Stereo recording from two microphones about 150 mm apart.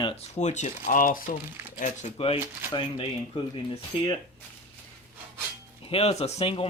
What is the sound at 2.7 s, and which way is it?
Speech, 35° left (ahead or behind).